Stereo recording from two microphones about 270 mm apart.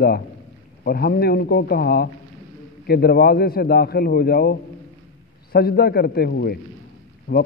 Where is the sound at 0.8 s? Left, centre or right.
Left.